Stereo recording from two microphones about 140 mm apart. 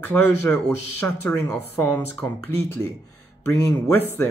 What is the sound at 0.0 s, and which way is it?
Speech, 15° left (ahead or behind).